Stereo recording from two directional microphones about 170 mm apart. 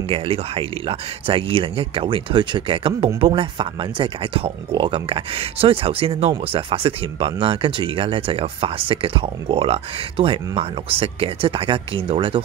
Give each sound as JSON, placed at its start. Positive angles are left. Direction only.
{"t": 0.1, "sound": "speech", "side_deg": -35}